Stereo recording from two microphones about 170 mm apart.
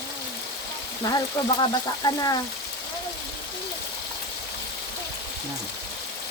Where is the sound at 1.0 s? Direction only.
20° left (ahead or behind).